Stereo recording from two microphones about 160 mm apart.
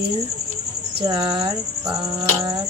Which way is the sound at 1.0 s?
30° right (ahead or behind).